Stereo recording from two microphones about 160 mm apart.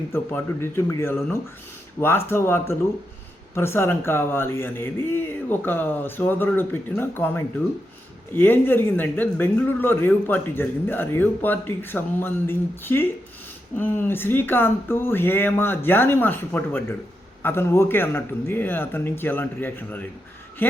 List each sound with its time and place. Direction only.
0.1 s speech: 15° left (ahead or behind)